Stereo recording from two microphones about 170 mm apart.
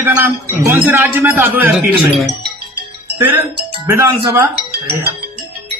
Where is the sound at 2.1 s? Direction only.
Centre (ahead or behind).